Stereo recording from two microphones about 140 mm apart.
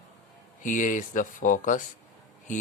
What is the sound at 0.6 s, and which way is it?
Speech, 65° left (ahead or behind).